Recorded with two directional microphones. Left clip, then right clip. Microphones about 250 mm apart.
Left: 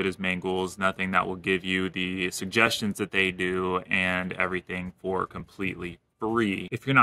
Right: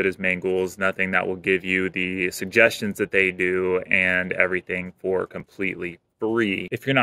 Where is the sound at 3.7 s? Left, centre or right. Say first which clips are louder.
Right 6 dB; left.